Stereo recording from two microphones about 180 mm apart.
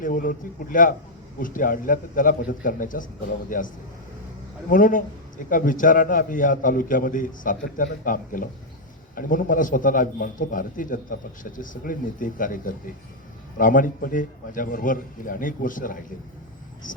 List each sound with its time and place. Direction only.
0.0 s a man's voice: 50° left (ahead or behind)
4.7 s a man's voice: 50° left (ahead or behind)